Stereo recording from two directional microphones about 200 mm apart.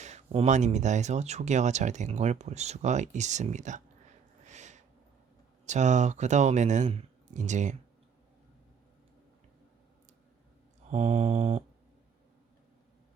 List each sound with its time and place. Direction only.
0.0 s speech: 35° right (ahead or behind)
4.4 s a sound: 35° right (ahead or behind)
5.6 s speech: 35° right (ahead or behind)
10.9 s speech: 35° right (ahead or behind)